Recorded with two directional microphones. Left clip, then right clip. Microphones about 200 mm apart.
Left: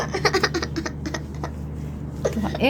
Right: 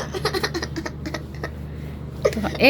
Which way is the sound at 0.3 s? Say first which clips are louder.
Left 4 dB; 15° left (ahead or behind).